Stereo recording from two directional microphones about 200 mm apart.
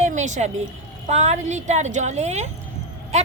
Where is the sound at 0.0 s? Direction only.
35° right (ahead or behind).